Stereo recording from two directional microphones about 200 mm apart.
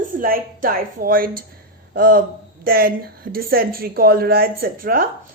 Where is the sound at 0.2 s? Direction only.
45° right (ahead or behind).